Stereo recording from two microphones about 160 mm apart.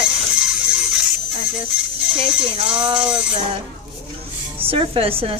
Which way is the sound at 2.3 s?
5° right (ahead or behind).